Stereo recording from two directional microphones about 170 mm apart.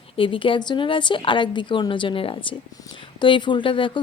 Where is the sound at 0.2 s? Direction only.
30° left (ahead or behind).